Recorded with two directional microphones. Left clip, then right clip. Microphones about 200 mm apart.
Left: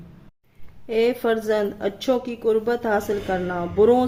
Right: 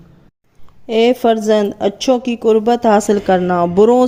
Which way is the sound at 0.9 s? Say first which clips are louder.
Right 8 dB; 35° right (ahead or behind).